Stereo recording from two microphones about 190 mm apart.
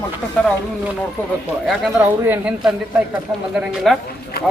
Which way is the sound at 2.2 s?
10° right (ahead or behind).